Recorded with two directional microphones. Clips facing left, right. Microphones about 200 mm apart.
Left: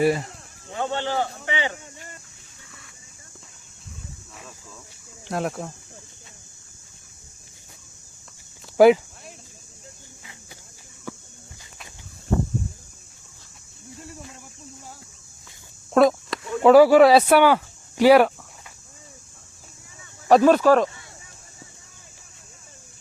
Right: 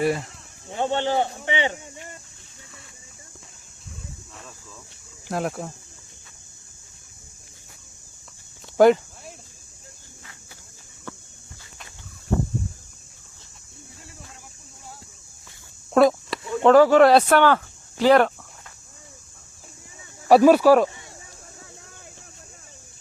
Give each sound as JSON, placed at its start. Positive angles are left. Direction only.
{"t": 0.0, "sound": "speech", "side_deg": 0}
{"t": 0.7, "sound": "a man's voice", "side_deg": -25}
{"t": 5.3, "sound": "speech", "side_deg": 0}
{"t": 8.8, "sound": "cricket", "side_deg": 5}
{"t": 11.1, "sound": "walk", "side_deg": 10}
{"t": 16.0, "sound": "speech", "side_deg": 0}
{"t": 20.2, "sound": "speech", "side_deg": -10}